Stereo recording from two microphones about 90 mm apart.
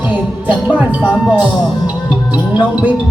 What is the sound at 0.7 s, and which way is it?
Speech, 15° right (ahead or behind).